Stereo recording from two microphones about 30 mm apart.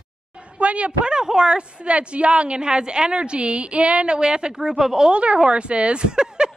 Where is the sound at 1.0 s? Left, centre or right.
Right.